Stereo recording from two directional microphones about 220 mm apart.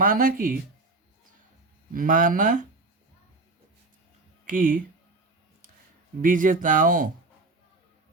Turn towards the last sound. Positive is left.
turn(degrees=-35)  # may be behind; listen again after turning